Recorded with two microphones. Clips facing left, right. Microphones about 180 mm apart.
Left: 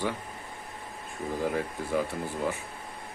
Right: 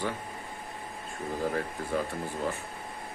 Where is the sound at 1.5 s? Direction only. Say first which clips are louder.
Left 1 dB; 10° left (ahead or behind).